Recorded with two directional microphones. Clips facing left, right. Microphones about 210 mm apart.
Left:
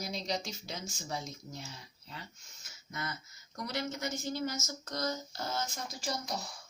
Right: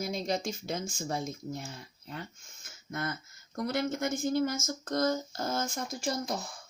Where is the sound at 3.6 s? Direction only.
50° right (ahead or behind).